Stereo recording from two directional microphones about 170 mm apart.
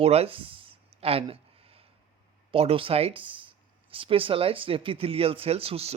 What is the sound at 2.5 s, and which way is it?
Speech, 35° right (ahead or behind).